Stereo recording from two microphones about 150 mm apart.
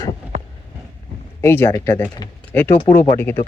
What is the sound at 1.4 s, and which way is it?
Speech, 15° left (ahead or behind).